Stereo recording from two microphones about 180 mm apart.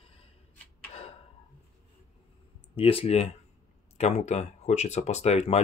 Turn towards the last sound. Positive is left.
turn(degrees=35)  # may be behind; listen again after turning